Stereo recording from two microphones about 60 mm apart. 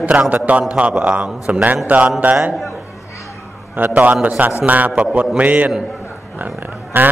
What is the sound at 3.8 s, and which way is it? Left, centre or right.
Mantra, right.